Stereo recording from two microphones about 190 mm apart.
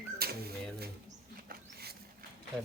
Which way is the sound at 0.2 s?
55° right (ahead or behind).